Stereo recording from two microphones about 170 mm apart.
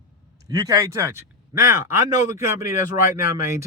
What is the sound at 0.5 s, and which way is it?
Speech, 20° right (ahead or behind).